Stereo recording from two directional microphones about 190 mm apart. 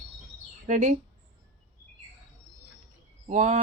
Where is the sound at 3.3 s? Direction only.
40° right (ahead or behind).